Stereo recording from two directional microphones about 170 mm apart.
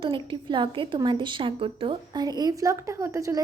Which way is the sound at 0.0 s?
30° right (ahead or behind).